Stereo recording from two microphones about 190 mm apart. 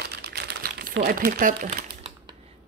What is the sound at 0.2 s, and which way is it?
Crumpling, 60° right (ahead or behind).